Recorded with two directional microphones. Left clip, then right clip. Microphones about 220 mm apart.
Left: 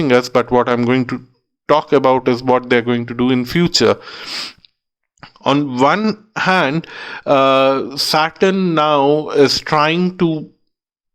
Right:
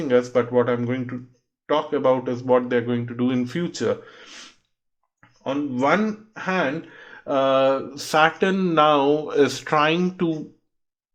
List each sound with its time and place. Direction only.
0.0 s speech: 45° left (ahead or behind)